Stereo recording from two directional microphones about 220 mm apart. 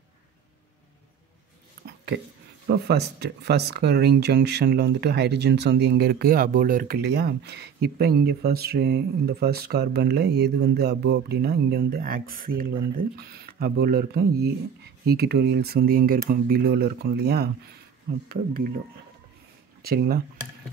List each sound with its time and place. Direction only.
1.9 s speech: 50° right (ahead or behind)
19.8 s speech: 45° right (ahead or behind)